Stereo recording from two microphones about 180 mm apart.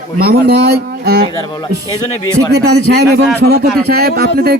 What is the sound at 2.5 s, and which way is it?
Speech, 65° right (ahead or behind).